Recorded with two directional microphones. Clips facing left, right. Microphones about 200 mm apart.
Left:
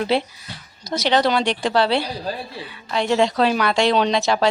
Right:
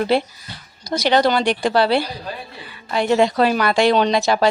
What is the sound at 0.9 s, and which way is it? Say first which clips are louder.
Speech: right 2 dB; centre (ahead or behind).